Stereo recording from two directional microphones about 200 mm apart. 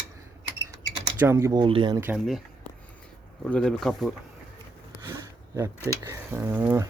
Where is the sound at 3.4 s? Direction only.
5° left (ahead or behind).